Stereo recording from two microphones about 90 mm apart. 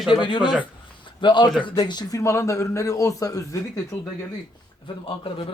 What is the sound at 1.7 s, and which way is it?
Speech, 50° left (ahead or behind).